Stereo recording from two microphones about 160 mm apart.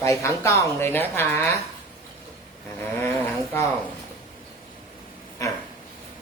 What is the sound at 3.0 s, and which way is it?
Speech, 15° left (ahead or behind).